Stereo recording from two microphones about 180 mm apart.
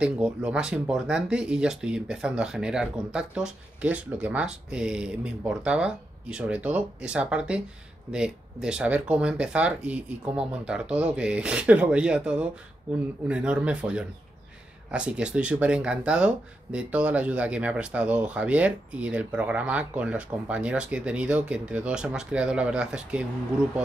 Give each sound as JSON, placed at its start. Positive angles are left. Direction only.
{"t": 0.0, "sound": "speech", "side_deg": -5}